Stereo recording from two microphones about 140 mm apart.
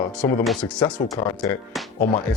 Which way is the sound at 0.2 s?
15° left (ahead or behind).